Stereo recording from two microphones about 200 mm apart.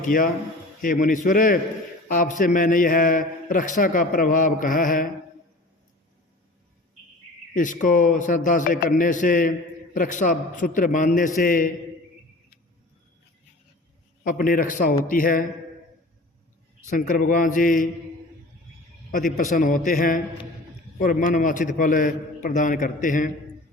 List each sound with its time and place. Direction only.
0.0 s a man's voice: 45° left (ahead or behind)
7.5 s a man's voice: 40° left (ahead or behind)
14.3 s a man's voice: 45° left (ahead or behind)
16.9 s a man's voice: 45° left (ahead or behind)
19.1 s a man's voice: 40° left (ahead or behind)